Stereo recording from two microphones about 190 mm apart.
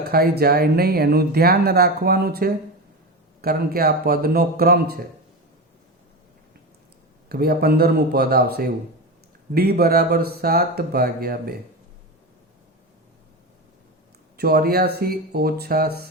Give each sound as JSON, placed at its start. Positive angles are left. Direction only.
{"t": 0.0, "sound": "speech", "side_deg": -55}
{"t": 7.3, "sound": "speech", "side_deg": -55}
{"t": 14.3, "sound": "speech", "side_deg": -55}